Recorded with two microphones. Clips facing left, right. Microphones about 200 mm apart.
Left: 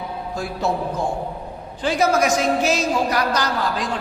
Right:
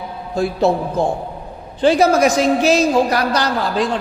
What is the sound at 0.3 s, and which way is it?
A man's voice, 30° right (ahead or behind).